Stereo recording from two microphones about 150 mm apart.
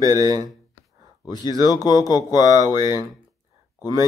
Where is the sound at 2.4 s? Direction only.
20° right (ahead or behind).